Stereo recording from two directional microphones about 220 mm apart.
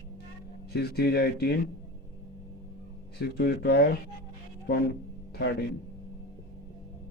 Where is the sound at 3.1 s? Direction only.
45° left (ahead or behind).